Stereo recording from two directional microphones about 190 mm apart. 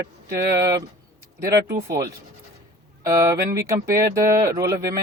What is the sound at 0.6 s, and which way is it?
Speech, 20° right (ahead or behind).